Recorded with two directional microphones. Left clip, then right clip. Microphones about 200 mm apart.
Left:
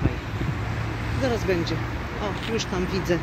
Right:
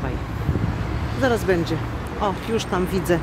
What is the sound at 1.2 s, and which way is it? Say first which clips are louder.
Speech: right 5 dB; 25° right (ahead or behind).